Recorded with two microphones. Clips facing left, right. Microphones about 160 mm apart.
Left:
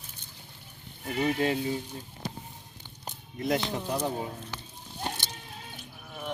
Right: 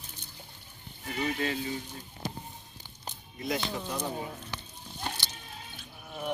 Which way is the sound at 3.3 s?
60° left (ahead or behind).